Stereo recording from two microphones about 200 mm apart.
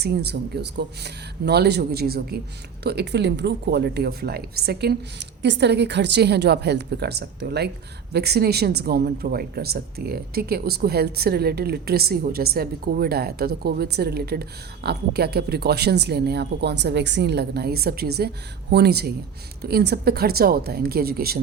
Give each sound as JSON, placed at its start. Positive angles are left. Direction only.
{"t": 0.0, "sound": "speech", "side_deg": -55}